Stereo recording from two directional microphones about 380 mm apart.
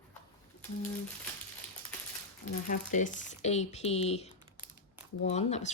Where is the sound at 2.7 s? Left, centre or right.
Centre.